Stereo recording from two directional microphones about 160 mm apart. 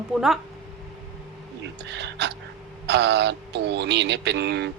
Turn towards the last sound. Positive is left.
turn(degrees=-90)